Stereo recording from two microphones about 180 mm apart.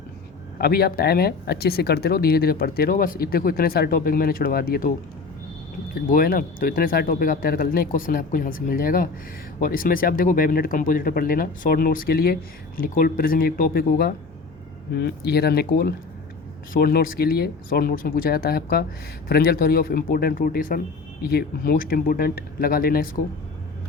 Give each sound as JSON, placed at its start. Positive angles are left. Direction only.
{"t": 0.6, "sound": "speech", "side_deg": 60}